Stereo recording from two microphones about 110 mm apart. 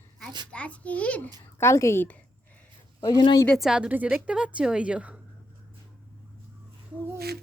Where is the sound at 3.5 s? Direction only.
5° right (ahead or behind).